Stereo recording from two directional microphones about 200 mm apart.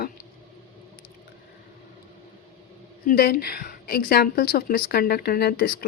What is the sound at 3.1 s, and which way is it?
A woman's voice, 50° left (ahead or behind).